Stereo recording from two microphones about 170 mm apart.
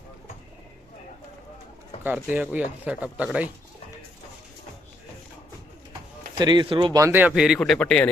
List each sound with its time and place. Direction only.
2.0 s speech: 10° right (ahead or behind)
6.4 s speech: 25° right (ahead or behind)
7.0 s speech: 10° right (ahead or behind); by 8.1 s 5° left (ahead or behind)